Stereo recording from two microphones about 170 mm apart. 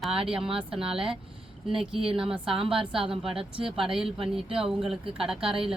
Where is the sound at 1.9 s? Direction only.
30° right (ahead or behind).